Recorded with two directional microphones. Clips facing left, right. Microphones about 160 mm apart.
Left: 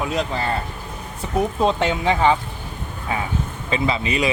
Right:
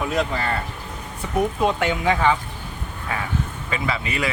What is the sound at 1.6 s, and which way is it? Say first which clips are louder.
Speech: left 3 dB; 25° left (ahead or behind).